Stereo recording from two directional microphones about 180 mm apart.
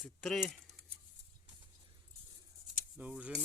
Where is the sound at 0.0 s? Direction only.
5° left (ahead or behind).